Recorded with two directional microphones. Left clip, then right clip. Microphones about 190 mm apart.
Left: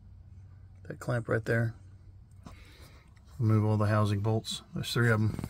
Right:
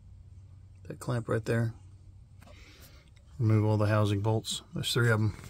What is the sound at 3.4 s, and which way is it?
Speech, 20° right (ahead or behind).